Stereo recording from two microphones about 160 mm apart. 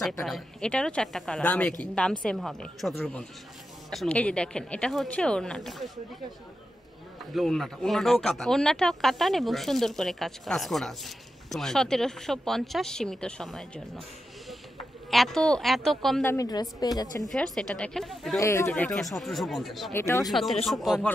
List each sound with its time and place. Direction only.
0.2 s speech: 5° left (ahead or behind)
7.3 s speech: centre (ahead or behind)
15.0 s speech: centre (ahead or behind)
16.3 s a woman's voice: 20° left (ahead or behind)
17.2 s speech: 5° left (ahead or behind)
18.4 s a woman's voice: 20° left (ahead or behind)
18.7 s speech: 5° left (ahead or behind)
19.9 s speech: 15° left (ahead or behind)
20.2 s speech: centre (ahead or behind)